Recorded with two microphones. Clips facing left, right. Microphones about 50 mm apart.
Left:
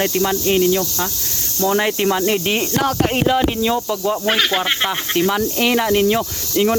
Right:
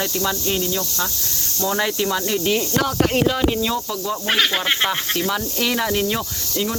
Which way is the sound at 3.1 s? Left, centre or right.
Centre.